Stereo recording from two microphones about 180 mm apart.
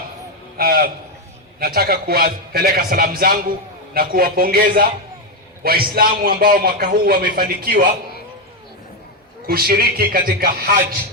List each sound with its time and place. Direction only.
0.5 s a man's voice: 55° right (ahead or behind)
9.5 s a man's voice: 55° right (ahead or behind)